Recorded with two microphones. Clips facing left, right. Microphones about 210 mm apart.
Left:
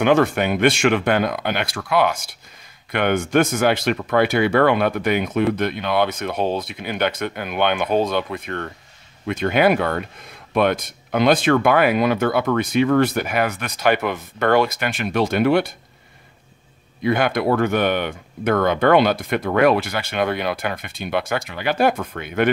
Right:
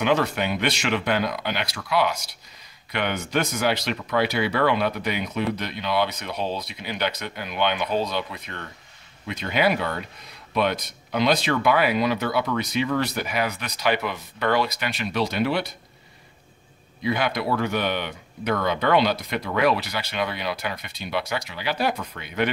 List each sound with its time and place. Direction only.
0.0 s speech: 50° left (ahead or behind)
17.0 s speech: 50° left (ahead or behind)